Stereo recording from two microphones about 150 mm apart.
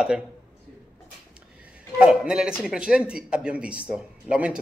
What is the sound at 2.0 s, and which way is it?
A man's voice, 5° right (ahead or behind).